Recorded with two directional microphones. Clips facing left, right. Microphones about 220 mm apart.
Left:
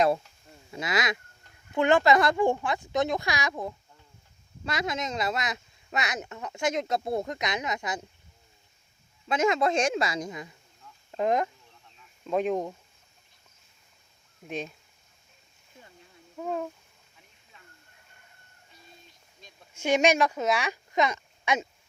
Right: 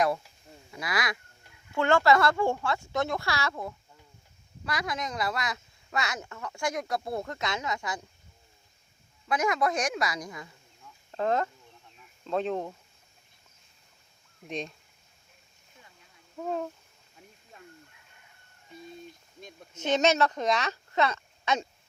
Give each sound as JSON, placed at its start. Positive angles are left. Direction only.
{"t": 0.7, "sound": "a woman's voice", "side_deg": 25}
{"t": 9.3, "sound": "a woman's voice", "side_deg": 25}
{"t": 14.4, "sound": "speech", "side_deg": 5}
{"t": 16.4, "sound": "speech", "side_deg": 0}
{"t": 17.5, "sound": "a sound", "side_deg": -45}
{"t": 19.7, "sound": "speech", "side_deg": 10}